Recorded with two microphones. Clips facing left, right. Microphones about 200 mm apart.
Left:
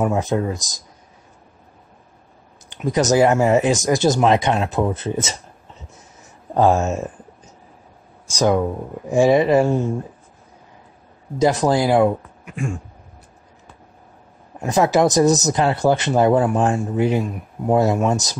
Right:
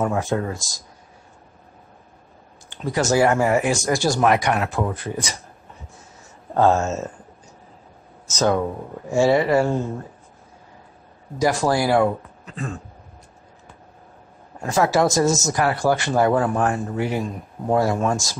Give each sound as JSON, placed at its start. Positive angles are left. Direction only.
{"t": 0.0, "sound": "speech", "side_deg": 20}
{"t": 2.7, "sound": "speech", "side_deg": 20}
{"t": 6.5, "sound": "a sound", "side_deg": 15}
{"t": 8.3, "sound": "speech", "side_deg": 15}
{"t": 11.3, "sound": "speech", "side_deg": 20}
{"t": 14.6, "sound": "speech", "side_deg": 20}